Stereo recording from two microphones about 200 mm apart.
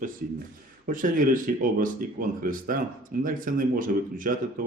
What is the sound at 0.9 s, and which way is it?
Speech, 40° right (ahead or behind).